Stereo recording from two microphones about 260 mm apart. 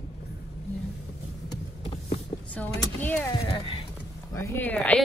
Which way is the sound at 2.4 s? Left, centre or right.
Centre.